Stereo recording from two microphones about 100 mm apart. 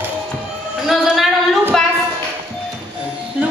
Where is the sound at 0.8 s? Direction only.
Centre (ahead or behind).